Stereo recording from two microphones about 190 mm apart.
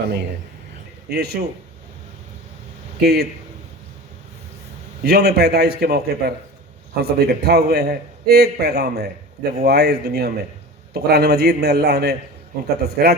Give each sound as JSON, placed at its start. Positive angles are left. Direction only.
{"t": 1.1, "sound": "a man's voice", "side_deg": -55}
{"t": 3.0, "sound": "a man's voice", "side_deg": -55}
{"t": 5.0, "sound": "a man's voice", "side_deg": -55}